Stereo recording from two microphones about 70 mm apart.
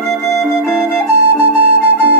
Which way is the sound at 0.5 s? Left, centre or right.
Right.